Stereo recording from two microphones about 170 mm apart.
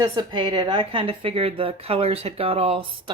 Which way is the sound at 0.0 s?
25° right (ahead or behind).